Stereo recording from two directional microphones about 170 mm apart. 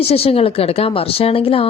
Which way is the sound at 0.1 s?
35° left (ahead or behind).